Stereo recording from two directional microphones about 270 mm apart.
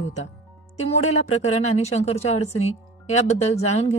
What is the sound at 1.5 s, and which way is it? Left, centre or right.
Speech, left.